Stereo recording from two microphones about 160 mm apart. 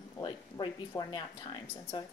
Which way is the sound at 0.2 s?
30° left (ahead or behind).